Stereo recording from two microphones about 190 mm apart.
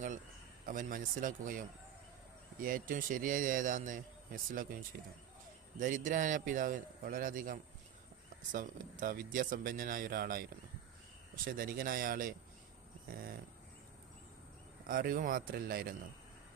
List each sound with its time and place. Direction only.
0.6 s a man's voice: 45° right (ahead or behind)
5.8 s a man's voice: 45° right (ahead or behind)
11.4 s a man's voice: 50° right (ahead or behind)
14.8 s a man's voice: 50° right (ahead or behind)